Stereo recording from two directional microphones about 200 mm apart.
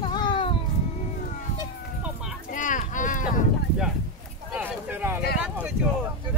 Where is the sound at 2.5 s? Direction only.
40° left (ahead or behind).